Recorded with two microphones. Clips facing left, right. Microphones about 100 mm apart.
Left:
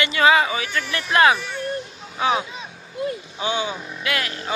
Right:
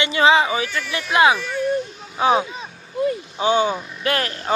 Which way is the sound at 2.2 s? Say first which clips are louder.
Right 4 dB; 35° right (ahead or behind).